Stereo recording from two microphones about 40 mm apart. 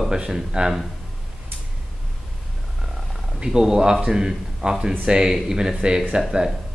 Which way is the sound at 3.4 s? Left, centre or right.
Centre.